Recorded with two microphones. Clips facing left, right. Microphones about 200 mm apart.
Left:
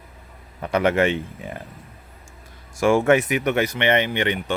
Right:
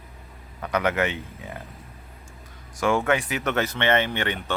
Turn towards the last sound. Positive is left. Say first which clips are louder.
# left 3 dB
turn(degrees=15)  # may be behind; listen again after turning